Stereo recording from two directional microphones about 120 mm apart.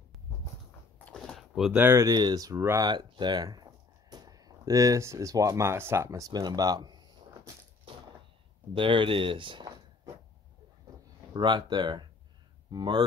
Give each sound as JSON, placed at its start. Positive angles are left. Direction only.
{"t": 0.9, "sound": "a sound", "side_deg": 5}
{"t": 1.8, "sound": "speech", "side_deg": -20}
{"t": 2.0, "sound": "speech", "side_deg": -35}
{"t": 2.9, "sound": "speech", "side_deg": -40}
{"t": 8.7, "sound": "speech", "side_deg": -45}
{"t": 11.3, "sound": "speech", "side_deg": -40}